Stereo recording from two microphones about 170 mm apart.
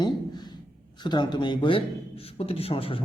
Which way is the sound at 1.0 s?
25° left (ahead or behind).